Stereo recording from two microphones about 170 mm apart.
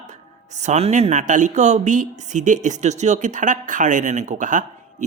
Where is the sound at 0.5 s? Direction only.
40° right (ahead or behind).